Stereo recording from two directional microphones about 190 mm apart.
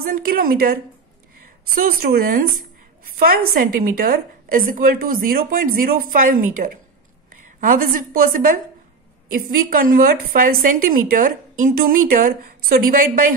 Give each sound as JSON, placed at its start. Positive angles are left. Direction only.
{"t": 0.0, "sound": "a woman's voice", "side_deg": -50}
{"t": 1.8, "sound": "a woman's voice", "side_deg": -50}